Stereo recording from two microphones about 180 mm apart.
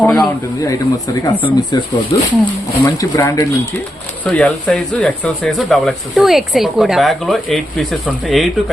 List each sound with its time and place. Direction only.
0.0 s a sound: 5° left (ahead or behind)
0.7 s speech: 20° left (ahead or behind)
4.3 s speech: 5° left (ahead or behind)